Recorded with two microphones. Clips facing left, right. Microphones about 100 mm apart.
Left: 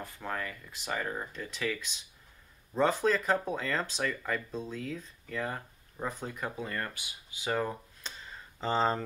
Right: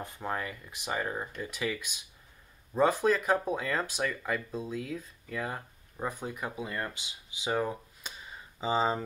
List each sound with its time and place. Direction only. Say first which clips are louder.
0.0 s speech: right 2 dB; 20° right (ahead or behind)